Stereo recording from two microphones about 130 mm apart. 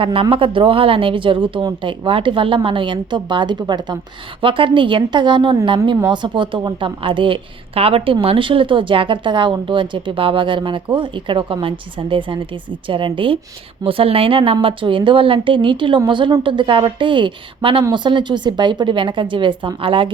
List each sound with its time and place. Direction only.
0.0 s a woman's voice: 45° right (ahead or behind)